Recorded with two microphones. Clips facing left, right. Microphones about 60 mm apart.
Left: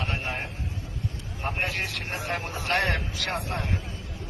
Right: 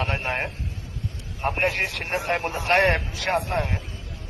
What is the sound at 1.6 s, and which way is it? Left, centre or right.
A man's voice, right.